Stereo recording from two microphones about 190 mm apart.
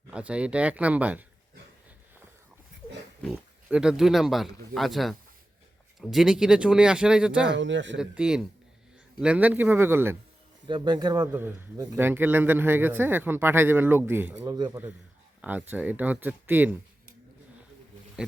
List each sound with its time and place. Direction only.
0.1 s speech: 5° right (ahead or behind)
3.2 s speech: centre (ahead or behind)
7.5 s a man's voice: 70° right (ahead or behind)
7.9 s speech: 5° right (ahead or behind)
10.7 s speech: 25° right (ahead or behind)